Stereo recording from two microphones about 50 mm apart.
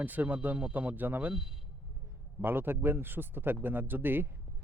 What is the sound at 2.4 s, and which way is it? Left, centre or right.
Speech, right.